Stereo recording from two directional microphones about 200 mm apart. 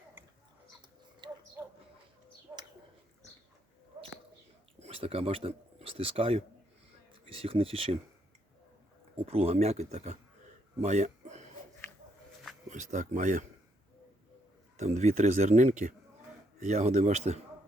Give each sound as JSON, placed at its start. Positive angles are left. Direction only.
{"t": 4.8, "sound": "speech", "side_deg": -30}
{"t": 9.1, "sound": "speech", "side_deg": -30}
{"t": 10.8, "sound": "a sound", "side_deg": -35}
{"t": 12.6, "sound": "speech", "side_deg": -35}
{"t": 14.8, "sound": "speech", "side_deg": -35}